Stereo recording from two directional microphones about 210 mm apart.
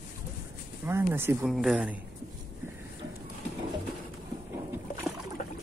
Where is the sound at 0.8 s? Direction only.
10° right (ahead or behind).